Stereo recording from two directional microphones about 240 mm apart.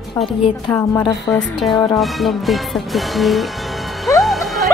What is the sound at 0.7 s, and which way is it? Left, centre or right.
Speech, centre.